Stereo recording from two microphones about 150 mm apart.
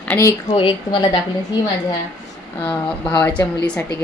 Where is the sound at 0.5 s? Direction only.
30° left (ahead or behind).